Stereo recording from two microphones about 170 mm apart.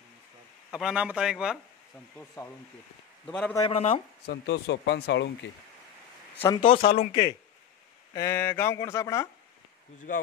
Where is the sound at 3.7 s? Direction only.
35° left (ahead or behind).